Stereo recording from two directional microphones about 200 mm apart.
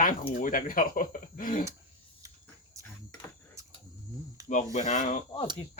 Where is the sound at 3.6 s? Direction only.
15° right (ahead or behind).